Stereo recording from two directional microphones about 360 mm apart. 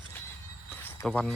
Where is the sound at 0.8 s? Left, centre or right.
Centre.